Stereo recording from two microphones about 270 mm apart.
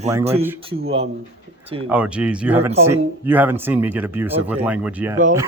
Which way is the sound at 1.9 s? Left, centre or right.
Centre.